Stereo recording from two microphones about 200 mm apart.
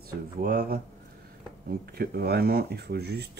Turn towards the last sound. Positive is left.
turn(degrees=-55)  # may be behind; listen again after turning